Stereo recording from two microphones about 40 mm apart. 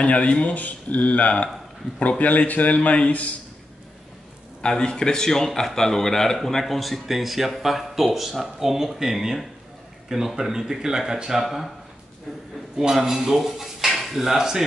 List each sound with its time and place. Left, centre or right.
0.0 s speech: left
4.6 s a man's voice: centre
11.4 s speech: centre
12.7 s speech: centre